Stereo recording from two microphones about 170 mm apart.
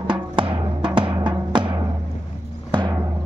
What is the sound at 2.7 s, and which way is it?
Timpani, 25° right (ahead or behind).